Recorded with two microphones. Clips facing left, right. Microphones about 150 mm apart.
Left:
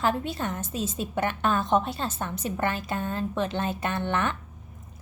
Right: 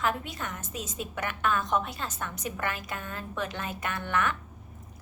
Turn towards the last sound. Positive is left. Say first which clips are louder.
# left 3 dB
turn(degrees=30)  # may be behind; listen again after turning